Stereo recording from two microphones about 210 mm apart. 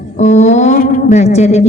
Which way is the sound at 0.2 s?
35° left (ahead or behind).